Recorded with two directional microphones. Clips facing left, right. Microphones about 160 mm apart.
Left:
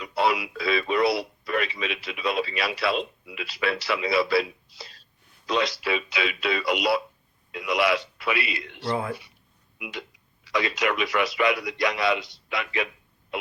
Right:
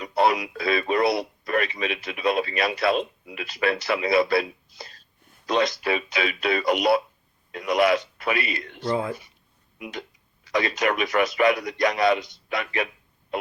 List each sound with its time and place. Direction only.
0.0 s speech: 45° right (ahead or behind)
8.9 s speech: 20° right (ahead or behind)
9.7 s speech: 40° right (ahead or behind)